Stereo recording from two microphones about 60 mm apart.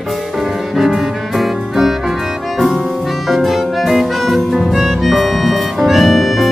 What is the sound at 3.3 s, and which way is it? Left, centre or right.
Music, centre.